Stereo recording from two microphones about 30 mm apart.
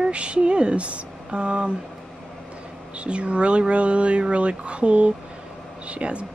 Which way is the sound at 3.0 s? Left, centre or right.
Right.